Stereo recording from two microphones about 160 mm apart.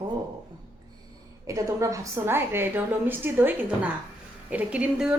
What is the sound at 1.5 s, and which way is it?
A woman's voice, 20° right (ahead or behind).